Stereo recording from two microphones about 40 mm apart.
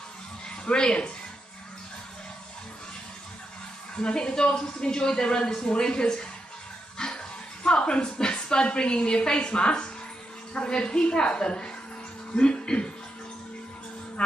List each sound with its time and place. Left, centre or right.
0.7 s a woman's voice: left
3.9 s a woman's voice: left